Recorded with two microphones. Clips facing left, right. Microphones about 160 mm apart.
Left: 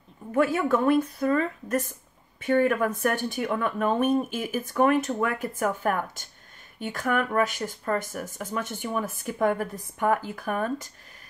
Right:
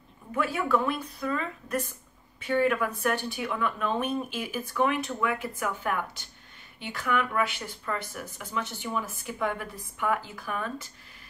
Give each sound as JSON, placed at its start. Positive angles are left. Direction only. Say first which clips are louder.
{"t": 0.3, "sound": "speech", "louder": "left 4 dB", "side_deg": 45}